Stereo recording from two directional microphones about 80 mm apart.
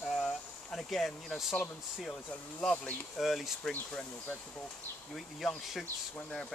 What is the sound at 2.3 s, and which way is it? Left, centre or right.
Speech, centre.